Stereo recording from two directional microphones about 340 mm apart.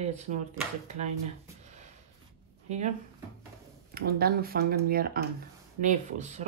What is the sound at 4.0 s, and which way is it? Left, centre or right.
Speech, right.